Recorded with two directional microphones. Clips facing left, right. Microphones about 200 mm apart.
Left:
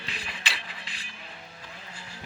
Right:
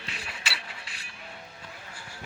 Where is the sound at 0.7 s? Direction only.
90° left.